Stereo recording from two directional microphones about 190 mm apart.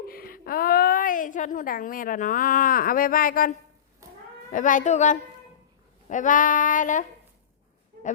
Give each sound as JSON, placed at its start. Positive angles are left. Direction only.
{"t": 0.1, "sound": "a woman's voice", "side_deg": 50}
{"t": 4.5, "sound": "a child's voice", "side_deg": 45}
{"t": 6.1, "sound": "female singing", "side_deg": 45}